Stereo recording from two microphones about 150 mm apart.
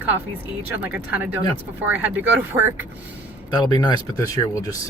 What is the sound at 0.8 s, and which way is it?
Speech, 10° right (ahead or behind).